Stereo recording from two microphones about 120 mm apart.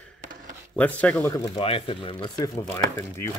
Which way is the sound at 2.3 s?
30° left (ahead or behind).